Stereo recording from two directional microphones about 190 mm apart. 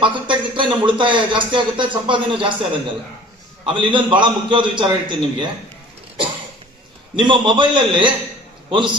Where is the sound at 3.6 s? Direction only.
25° right (ahead or behind).